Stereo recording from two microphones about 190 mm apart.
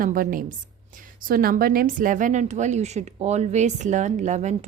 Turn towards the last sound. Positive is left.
turn(degrees=-40)  # may be behind; listen again after turning